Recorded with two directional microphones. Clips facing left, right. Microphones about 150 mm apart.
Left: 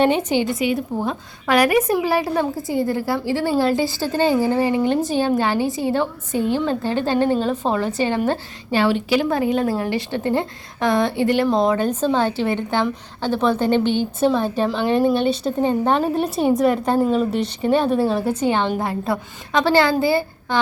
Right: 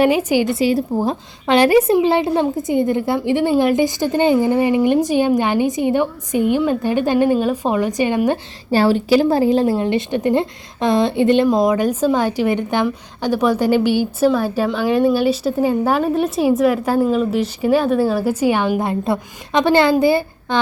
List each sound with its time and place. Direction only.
0.0 s a woman's voice: 10° right (ahead or behind)
0.4 s a woman's voice: 35° right (ahead or behind); by 8.4 s 15° right (ahead or behind)
8.7 s a woman's voice: 40° right (ahead or behind); by 18.9 s 10° right (ahead or behind)
18.9 s a woman's voice: 20° right (ahead or behind)